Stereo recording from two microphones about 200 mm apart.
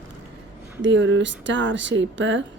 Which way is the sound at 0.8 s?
65° right (ahead or behind).